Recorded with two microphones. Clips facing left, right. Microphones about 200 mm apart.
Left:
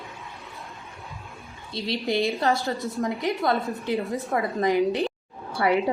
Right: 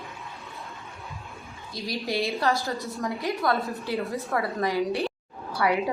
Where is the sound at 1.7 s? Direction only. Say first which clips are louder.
Left 3 dB; 25° left (ahead or behind).